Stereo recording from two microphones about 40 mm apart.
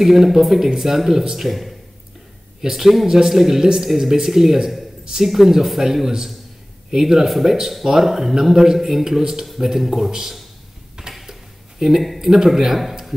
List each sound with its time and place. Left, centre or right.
0.0 s speech: centre
2.6 s speech: centre
8.7 s speech: centre
9.0 s speech: centre
11.1 s tick-tock: centre
12.0 s speech: centre